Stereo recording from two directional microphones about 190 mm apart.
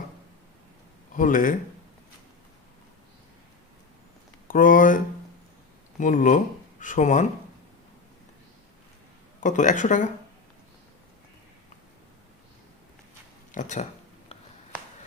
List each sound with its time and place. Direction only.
1.1 s speech: 45° left (ahead or behind)
4.4 s speech: 45° left (ahead or behind)
9.4 s speech: 40° left (ahead or behind)
13.5 s speech: 40° left (ahead or behind)